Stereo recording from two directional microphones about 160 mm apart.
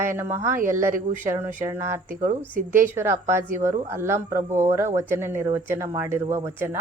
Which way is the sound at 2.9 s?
15° right (ahead or behind).